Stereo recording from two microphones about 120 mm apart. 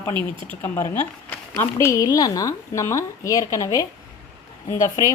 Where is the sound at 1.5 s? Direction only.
20° left (ahead or behind).